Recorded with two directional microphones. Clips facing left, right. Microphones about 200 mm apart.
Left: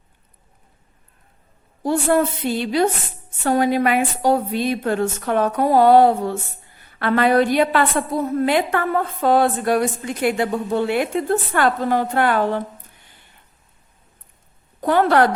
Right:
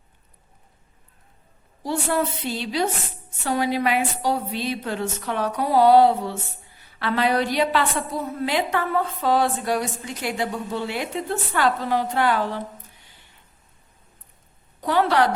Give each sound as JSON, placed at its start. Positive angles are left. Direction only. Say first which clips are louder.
{"t": 1.8, "sound": "a woman's voice", "louder": "left 6 dB", "side_deg": 50}
{"t": 14.8, "sound": "a woman's voice", "louder": "left 4 dB", "side_deg": 50}